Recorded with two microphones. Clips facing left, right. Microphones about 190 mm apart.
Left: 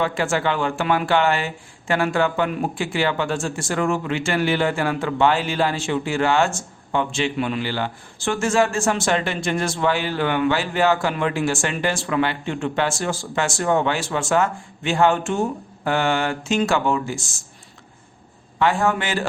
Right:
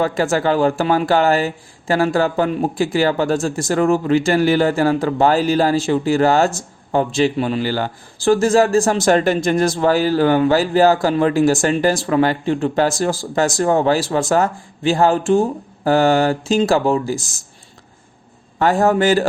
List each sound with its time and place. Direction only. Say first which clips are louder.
0.0 s speech: right 4 dB; 40° right (ahead or behind)
18.6 s speech: right 6 dB; 40° right (ahead or behind)